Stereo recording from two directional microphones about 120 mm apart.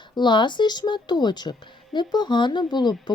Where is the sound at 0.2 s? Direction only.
40° left (ahead or behind).